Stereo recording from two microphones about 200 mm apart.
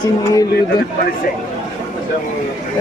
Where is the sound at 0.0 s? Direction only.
20° left (ahead or behind).